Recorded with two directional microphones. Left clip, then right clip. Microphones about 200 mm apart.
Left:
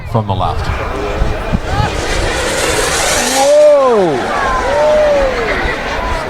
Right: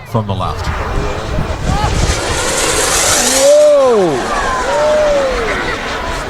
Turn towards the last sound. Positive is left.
turn(degrees=-5)  # may be behind; listen again after turning